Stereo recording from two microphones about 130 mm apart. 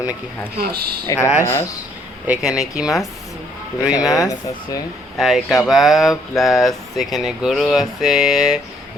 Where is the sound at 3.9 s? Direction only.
30° left (ahead or behind).